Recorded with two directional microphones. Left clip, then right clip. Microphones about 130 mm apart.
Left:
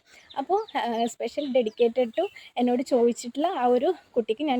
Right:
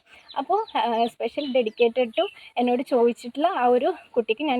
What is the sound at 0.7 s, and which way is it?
Speech, 35° left (ahead or behind).